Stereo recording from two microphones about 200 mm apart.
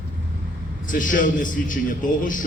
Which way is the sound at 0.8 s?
40° left (ahead or behind).